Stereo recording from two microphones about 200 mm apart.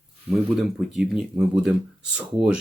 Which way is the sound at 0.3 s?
Centre (ahead or behind).